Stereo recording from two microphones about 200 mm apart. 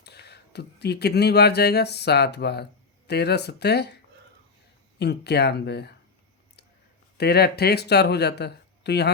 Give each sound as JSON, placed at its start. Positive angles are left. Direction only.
{"t": 0.0, "sound": "speech", "side_deg": 55}
{"t": 4.9, "sound": "speech", "side_deg": 55}
{"t": 7.2, "sound": "speech", "side_deg": 55}